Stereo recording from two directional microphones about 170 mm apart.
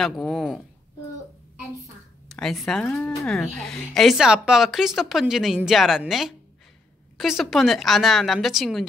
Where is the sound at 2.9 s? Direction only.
20° left (ahead or behind).